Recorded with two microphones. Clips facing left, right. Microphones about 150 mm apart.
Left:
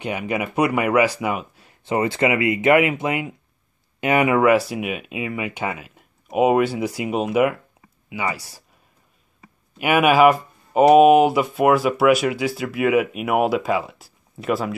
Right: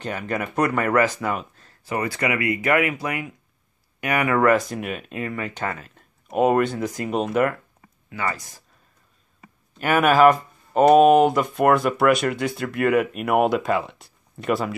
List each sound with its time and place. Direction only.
0.0 s speech: 10° left (ahead or behind)
1.9 s speech: 25° left (ahead or behind)
4.4 s speech: 10° left (ahead or behind)
9.8 s speech: 10° left (ahead or behind)